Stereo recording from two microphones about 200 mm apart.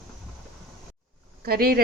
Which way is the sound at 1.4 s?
50° right (ahead or behind).